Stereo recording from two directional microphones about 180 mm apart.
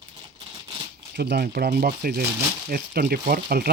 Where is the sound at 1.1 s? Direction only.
65° right (ahead or behind).